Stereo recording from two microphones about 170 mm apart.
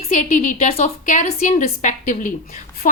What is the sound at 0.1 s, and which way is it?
A woman's voice, 45° left (ahead or behind).